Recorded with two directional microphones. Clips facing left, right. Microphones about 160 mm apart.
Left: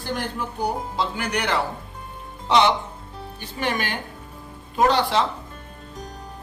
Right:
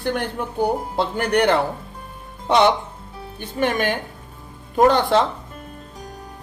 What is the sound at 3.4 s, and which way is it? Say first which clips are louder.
Speech: right 6 dB; 50° right (ahead or behind).